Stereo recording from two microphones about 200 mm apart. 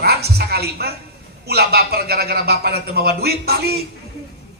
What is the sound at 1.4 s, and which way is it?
Speech, 50° right (ahead or behind).